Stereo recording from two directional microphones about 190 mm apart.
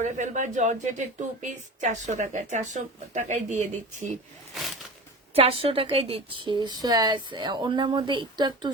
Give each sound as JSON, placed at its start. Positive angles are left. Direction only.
{"t": 0.0, "sound": "a woman's voice", "side_deg": -40}
{"t": 4.5, "sound": "a sound", "side_deg": 0}
{"t": 5.3, "sound": "a woman's voice", "side_deg": -30}